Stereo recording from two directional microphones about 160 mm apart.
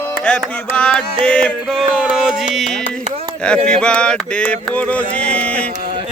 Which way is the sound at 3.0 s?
40° right (ahead or behind).